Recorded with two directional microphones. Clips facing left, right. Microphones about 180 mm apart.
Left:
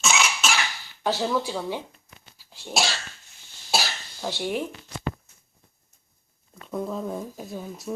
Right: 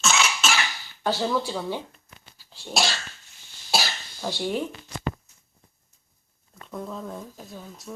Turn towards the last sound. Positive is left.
turn(degrees=10)  # may be behind; listen again after turning